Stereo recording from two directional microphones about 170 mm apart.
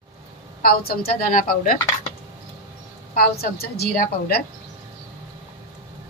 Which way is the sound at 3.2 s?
65° left (ahead or behind).